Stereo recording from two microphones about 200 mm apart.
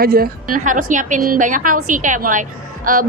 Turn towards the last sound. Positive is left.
turn(degrees=-45)  # may be behind; listen again after turning